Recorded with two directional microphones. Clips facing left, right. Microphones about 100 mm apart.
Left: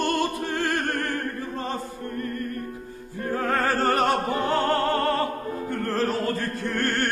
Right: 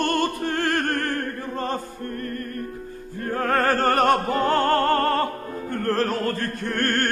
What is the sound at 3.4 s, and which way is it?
Opera, 50° right (ahead or behind).